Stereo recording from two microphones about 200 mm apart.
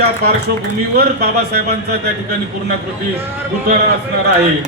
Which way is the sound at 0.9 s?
50° right (ahead or behind).